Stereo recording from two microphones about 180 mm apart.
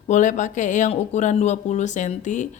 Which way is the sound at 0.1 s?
45° left (ahead or behind).